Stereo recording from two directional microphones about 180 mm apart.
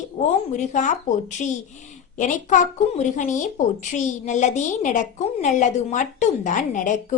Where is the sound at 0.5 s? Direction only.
45° left (ahead or behind).